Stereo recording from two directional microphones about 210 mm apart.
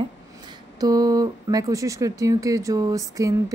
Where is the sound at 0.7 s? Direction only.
15° right (ahead or behind).